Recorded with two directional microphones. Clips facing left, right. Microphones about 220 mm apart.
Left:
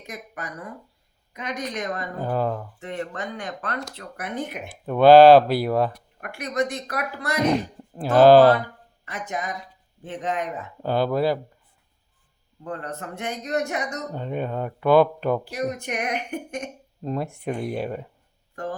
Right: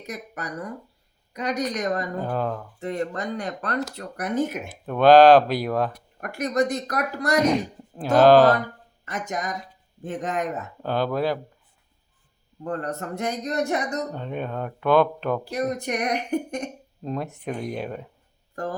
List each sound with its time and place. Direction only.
0.0 s a woman's voice: 40° right (ahead or behind)
2.2 s speech: 5° left (ahead or behind)
2.8 s a woman's voice: 35° right (ahead or behind)
4.7 s speech: 10° left (ahead or behind)
6.1 s a woman's voice: 40° right (ahead or behind)
7.5 s speech: 5° left (ahead or behind)
9.0 s speech: 45° right (ahead or behind)
10.8 s speech: 10° left (ahead or behind)
12.6 s a woman's voice: 40° right (ahead or behind)
14.1 s speech: 10° left (ahead or behind)
15.4 s a woman's voice: 40° right (ahead or behind)
17.0 s speech: 5° left (ahead or behind)